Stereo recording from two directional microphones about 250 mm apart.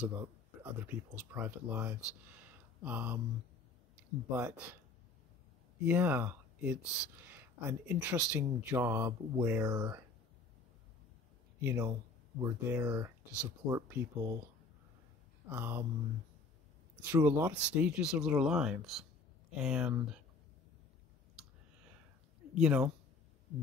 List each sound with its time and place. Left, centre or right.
0.0 s speech: centre
5.9 s speech: centre
11.6 s speech: centre
15.5 s speech: centre
17.0 s speech: centre
22.5 s speech: centre